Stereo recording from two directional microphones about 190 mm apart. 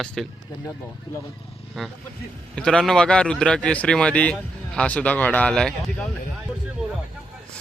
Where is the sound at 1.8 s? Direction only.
Centre (ahead or behind).